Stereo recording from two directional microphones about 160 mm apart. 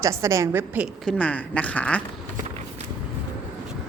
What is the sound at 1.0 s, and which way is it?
Speech, 5° left (ahead or behind).